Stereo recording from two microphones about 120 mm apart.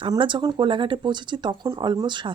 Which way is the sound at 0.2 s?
45° right (ahead or behind).